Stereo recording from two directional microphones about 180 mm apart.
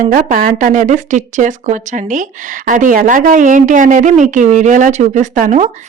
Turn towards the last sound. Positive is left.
turn(degrees=-45)  # may be behind; listen again after turning